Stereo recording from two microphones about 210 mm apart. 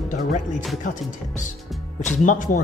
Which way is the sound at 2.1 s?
40° left (ahead or behind).